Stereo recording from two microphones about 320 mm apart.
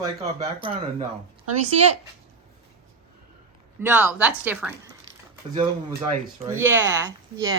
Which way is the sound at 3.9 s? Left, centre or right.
Centre.